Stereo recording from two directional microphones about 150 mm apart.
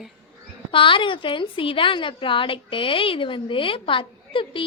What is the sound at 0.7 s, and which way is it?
A woman's voice, 35° left (ahead or behind).